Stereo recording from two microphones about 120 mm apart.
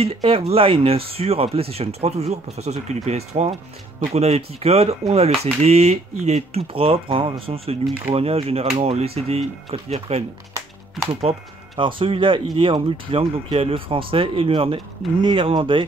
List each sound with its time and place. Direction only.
0.0 s speech: 50° right (ahead or behind)
11.1 s speech: 50° right (ahead or behind)